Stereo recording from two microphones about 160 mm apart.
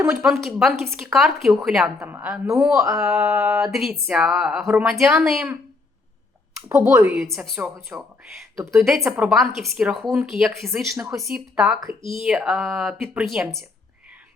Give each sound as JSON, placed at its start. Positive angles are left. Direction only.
{"t": 0.0, "sound": "speech", "side_deg": -15}
{"t": 0.4, "sound": "speech", "side_deg": 0}
{"t": 2.1, "sound": "speech", "side_deg": -15}
{"t": 2.9, "sound": "speech", "side_deg": -5}
{"t": 3.2, "sound": "speech", "side_deg": -15}
{"t": 3.6, "sound": "speech", "side_deg": 0}
{"t": 6.7, "sound": "speech", "side_deg": -15}
{"t": 7.2, "sound": "speech", "side_deg": 0}
{"t": 7.9, "sound": "speech", "side_deg": -15}